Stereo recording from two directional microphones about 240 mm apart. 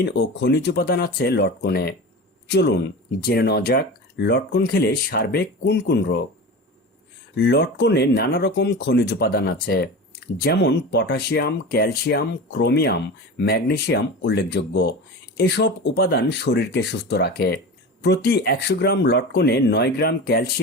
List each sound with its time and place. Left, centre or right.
0.0 s speech: left
7.3 s speech: left